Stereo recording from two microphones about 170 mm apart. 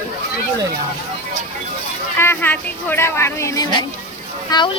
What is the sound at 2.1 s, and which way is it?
Speech, 15° left (ahead or behind).